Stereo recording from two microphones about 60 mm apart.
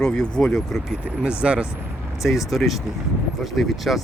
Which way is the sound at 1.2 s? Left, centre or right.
Centre.